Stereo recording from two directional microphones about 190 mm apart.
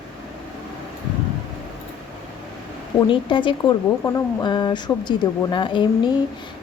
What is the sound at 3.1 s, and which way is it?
Speech, 25° left (ahead or behind).